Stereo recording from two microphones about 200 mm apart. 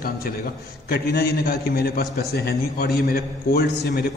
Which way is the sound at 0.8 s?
50° left (ahead or behind).